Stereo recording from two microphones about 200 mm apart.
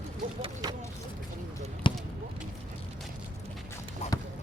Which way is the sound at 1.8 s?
25° left (ahead or behind).